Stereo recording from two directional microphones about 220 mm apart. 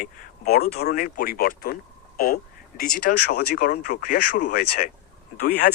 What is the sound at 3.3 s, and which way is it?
Speech, 45° left (ahead or behind).